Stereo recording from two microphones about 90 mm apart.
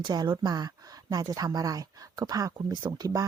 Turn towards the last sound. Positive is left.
turn(degrees=-45)  # may be behind; listen again after turning